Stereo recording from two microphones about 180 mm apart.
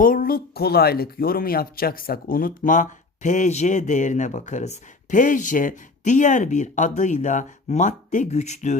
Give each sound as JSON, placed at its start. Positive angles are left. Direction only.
{"t": 0.0, "sound": "speech", "side_deg": 50}